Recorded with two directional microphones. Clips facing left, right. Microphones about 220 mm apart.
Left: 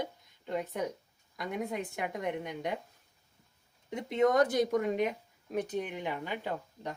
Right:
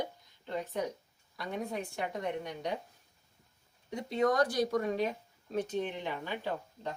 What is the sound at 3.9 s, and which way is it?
A woman's voice, 20° left (ahead or behind).